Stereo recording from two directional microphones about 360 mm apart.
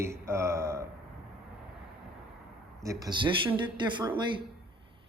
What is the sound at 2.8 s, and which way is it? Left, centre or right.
Speech, centre.